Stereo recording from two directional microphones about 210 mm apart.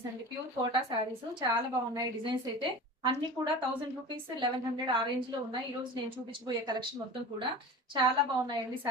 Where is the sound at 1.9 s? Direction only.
20° right (ahead or behind).